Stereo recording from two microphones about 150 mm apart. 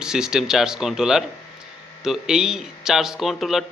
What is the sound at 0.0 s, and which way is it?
Speech, 5° right (ahead or behind).